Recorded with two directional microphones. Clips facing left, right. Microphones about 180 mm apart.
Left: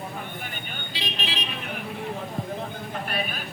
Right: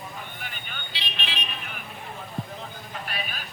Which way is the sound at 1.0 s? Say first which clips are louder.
Left 4 dB; 40° left (ahead or behind).